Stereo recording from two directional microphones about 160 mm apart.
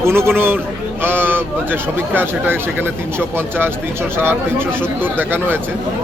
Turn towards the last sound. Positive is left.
turn(degrees=-10)  # may be behind; listen again after turning